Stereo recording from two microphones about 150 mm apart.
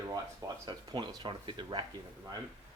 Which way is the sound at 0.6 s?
30° right (ahead or behind).